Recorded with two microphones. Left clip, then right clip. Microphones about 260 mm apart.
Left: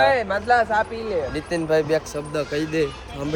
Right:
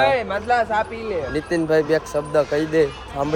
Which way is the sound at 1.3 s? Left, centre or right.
Right.